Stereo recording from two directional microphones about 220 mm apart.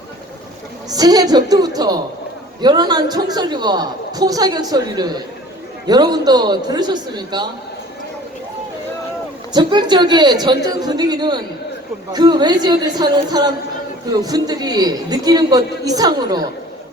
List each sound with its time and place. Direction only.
0.9 s a woman's voice: 15° right (ahead or behind)
9.5 s a man's voice: 20° right (ahead or behind)